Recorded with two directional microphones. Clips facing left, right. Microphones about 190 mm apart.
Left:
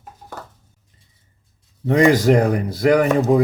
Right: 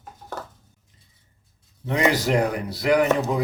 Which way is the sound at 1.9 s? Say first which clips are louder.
Left 7 dB; 45° left (ahead or behind).